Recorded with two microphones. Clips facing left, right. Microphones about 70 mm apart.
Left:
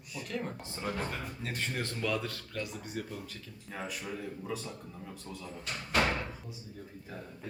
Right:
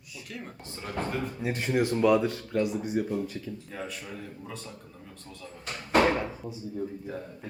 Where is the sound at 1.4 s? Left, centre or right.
Centre.